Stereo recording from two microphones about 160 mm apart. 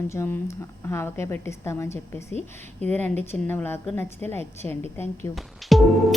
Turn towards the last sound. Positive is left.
turn(degrees=0)  # may be behind; listen again after turning